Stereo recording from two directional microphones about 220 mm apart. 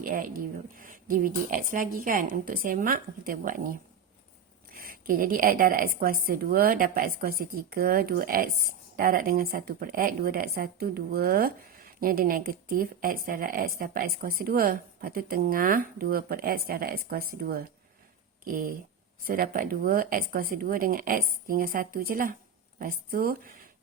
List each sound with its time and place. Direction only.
0.0 s a woman's voice: 40° right (ahead or behind)